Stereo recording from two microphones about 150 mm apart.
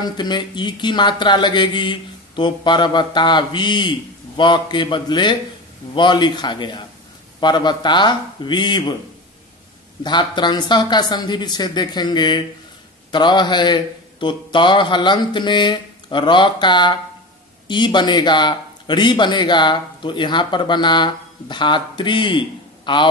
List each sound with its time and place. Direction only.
0.0 s speech: 30° left (ahead or behind)
10.0 s speech: 30° left (ahead or behind)